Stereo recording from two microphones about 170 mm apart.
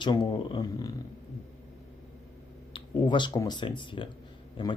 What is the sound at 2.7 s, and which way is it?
Speech, 30° left (ahead or behind).